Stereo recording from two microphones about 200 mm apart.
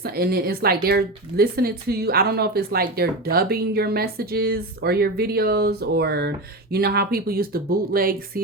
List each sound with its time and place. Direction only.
0.0 s a woman's voice: 50° right (ahead or behind)